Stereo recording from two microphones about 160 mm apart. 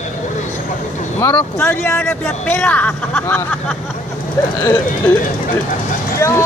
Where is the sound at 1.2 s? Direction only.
15° left (ahead or behind).